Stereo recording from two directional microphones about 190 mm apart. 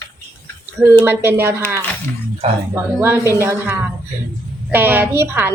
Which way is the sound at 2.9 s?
10° right (ahead or behind).